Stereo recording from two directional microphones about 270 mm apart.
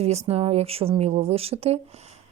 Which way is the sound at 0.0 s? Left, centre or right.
Right.